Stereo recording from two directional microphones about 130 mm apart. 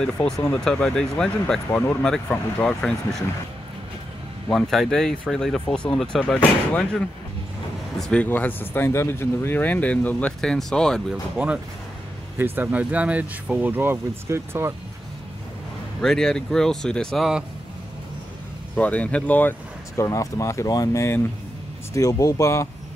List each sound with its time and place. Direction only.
0.0 s speech: 10° left (ahead or behind)
4.5 s speech: 5° left (ahead or behind)
8.0 s speech: 10° left (ahead or behind)
11.3 s speech: 10° right (ahead or behind)
16.0 s speech: 5° left (ahead or behind)
18.8 s speech: 10° left (ahead or behind)
20.0 s speech: 25° left (ahead or behind)